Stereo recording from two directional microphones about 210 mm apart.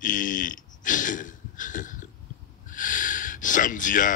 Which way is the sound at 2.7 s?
40° left (ahead or behind).